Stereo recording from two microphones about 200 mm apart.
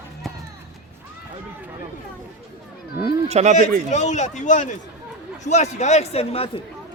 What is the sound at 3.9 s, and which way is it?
A man's voice, 35° left (ahead or behind).